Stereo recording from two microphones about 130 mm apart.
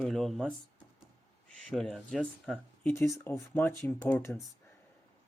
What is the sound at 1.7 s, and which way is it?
Speech, 5° left (ahead or behind).